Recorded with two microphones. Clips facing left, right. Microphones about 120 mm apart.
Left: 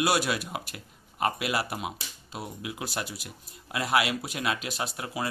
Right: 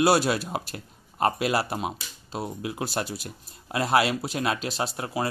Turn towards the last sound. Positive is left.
turn(degrees=-35)  # may be behind; listen again after turning